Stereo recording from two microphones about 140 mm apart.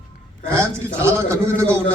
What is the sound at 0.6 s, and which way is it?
A man's voice, 20° right (ahead or behind).